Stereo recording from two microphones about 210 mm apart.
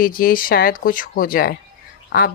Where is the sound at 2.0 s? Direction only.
45° left (ahead or behind).